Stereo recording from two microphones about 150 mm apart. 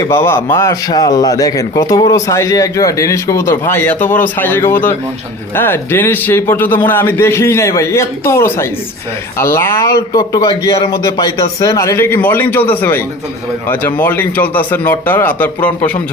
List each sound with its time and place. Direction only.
0.1 s a man's voice: 15° left (ahead or behind)